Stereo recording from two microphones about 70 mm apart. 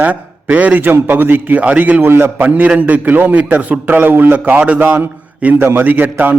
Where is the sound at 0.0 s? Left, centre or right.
Right.